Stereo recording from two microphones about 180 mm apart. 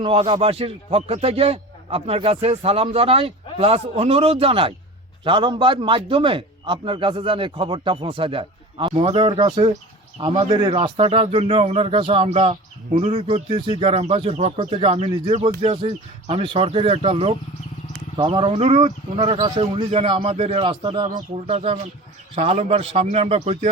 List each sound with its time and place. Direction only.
0.0 s a man's voice: 30° right (ahead or behind)